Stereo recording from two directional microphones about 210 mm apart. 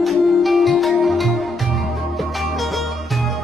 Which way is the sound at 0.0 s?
Centre (ahead or behind).